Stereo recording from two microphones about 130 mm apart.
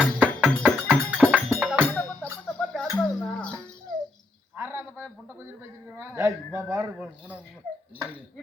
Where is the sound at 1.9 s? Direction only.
5° left (ahead or behind).